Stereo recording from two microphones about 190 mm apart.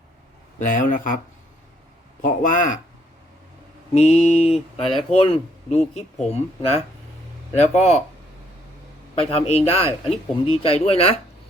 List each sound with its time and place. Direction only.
0.6 s speech: 45° left (ahead or behind)
2.2 s speech: 45° left (ahead or behind)
3.9 s a man's voice: 35° left (ahead or behind)
9.2 s a man's voice: 35° left (ahead or behind)